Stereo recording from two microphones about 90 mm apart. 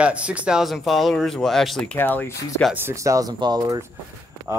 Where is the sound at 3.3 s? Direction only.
55° right (ahead or behind).